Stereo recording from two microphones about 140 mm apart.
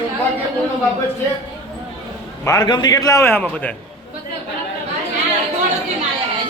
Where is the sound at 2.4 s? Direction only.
25° left (ahead or behind); by 3.7 s 10° left (ahead or behind).